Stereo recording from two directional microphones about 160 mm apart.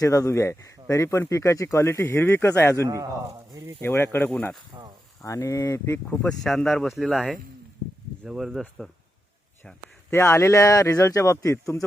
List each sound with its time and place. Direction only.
0.0 s speech: 20° left (ahead or behind)
2.8 s a man's voice: 20° right (ahead or behind)
3.8 s speech: 15° left (ahead or behind)
5.2 s speech: 20° left (ahead or behind)
6.2 s speech: 5° left (ahead or behind)
10.1 s speech: 15° left (ahead or behind)